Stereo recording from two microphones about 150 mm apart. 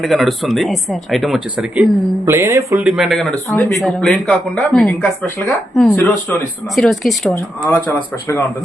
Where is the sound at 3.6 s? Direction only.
15° left (ahead or behind).